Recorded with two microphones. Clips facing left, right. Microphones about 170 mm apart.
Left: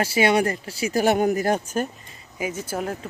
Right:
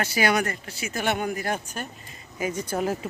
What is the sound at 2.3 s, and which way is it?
Speech, 5° left (ahead or behind).